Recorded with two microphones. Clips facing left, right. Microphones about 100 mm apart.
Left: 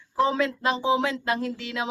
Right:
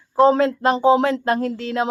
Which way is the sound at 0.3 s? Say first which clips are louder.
Right 7 dB; 45° right (ahead or behind).